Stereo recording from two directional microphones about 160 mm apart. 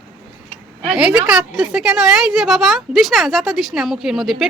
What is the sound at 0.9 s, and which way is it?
A woman's voice, 5° right (ahead or behind).